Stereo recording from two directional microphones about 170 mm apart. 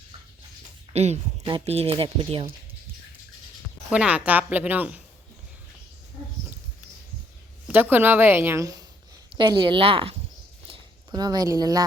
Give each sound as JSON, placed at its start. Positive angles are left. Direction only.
{"t": 0.9, "sound": "speech", "side_deg": -40}
{"t": 3.8, "sound": "a woman's voice", "side_deg": -5}
{"t": 7.7, "sound": "a woman's voice", "side_deg": -10}
{"t": 9.3, "sound": "speech", "side_deg": -30}
{"t": 10.7, "sound": "a sound", "side_deg": -25}